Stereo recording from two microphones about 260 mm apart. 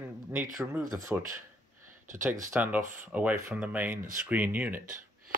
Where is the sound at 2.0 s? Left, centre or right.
Right.